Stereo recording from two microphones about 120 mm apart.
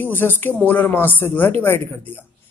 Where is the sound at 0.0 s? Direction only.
15° left (ahead or behind).